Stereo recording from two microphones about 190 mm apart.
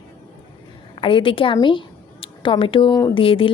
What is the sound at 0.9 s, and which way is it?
A woman's voice, 25° left (ahead or behind).